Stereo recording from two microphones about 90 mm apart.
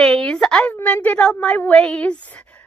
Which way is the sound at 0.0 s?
10° left (ahead or behind).